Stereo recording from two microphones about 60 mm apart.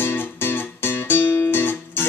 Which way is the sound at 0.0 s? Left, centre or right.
Left.